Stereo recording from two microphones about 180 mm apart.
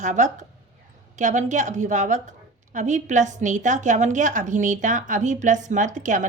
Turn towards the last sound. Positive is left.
turn(degrees=-45)  # may be behind; listen again after turning